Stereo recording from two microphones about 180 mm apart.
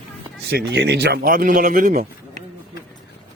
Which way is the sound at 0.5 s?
75° right (ahead or behind).